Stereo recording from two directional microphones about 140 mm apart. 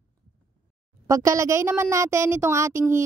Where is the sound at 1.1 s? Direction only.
25° right (ahead or behind).